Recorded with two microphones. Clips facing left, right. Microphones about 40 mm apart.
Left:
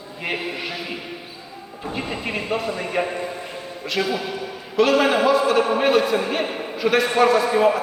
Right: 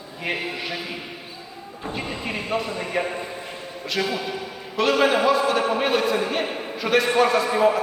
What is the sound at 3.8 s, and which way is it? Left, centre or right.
A man's voice, centre.